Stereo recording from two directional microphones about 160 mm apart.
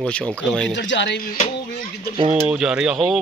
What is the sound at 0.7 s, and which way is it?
Speech, 90° left.